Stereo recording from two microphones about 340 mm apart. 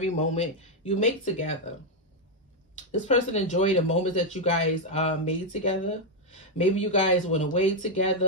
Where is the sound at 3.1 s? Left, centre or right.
Centre.